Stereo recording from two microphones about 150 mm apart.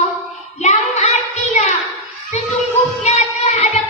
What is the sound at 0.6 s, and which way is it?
Child singing, 50° left (ahead or behind).